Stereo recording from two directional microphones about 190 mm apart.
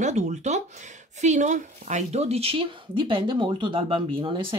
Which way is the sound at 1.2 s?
40° right (ahead or behind).